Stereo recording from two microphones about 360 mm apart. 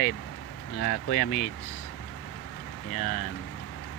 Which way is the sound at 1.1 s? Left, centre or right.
Left.